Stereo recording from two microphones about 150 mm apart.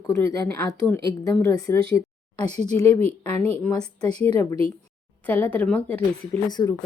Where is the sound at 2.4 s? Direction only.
45° right (ahead or behind).